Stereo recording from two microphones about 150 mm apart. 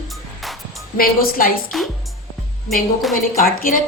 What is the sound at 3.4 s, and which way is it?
Speech, 75° left (ahead or behind).